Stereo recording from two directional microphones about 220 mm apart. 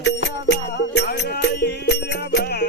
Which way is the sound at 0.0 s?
50° left (ahead or behind).